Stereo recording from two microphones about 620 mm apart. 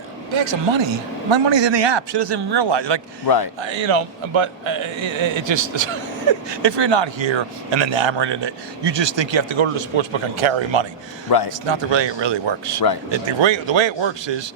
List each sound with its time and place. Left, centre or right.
0.3 s a man's voice: right
3.2 s speech: left
3.6 s speech: right
11.3 s speech: left
11.7 s speech: right